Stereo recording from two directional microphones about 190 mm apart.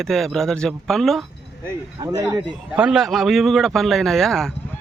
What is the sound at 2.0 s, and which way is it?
Speech, 20° right (ahead or behind).